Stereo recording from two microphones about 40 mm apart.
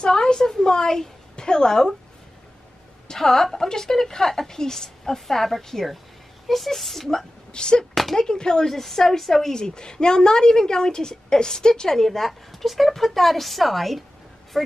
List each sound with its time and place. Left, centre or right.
0.0 s a sound: centre
3.1 s a woman's voice: centre
7.1 s a woman's voice: centre
7.9 s a sound: centre
8.2 s speech: centre
8.6 s a woman's voice: centre
9.6 s a woman's voice: left; by 14.0 s centre